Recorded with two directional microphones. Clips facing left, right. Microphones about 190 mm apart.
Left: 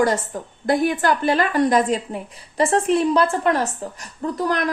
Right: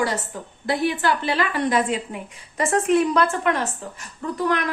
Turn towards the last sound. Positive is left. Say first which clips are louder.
# left 1 dB
turn(degrees=40)  # may be behind; listen again after turning